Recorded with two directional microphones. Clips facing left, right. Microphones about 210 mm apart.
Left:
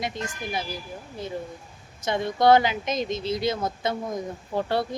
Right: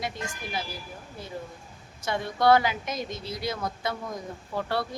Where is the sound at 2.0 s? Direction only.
20° left (ahead or behind).